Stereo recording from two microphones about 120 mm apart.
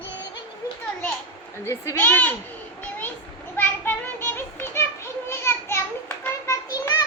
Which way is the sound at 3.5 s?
15° left (ahead or behind).